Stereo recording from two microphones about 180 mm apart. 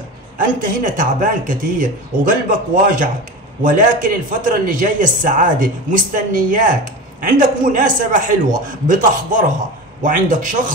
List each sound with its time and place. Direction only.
0.4 s speech: 50° right (ahead or behind)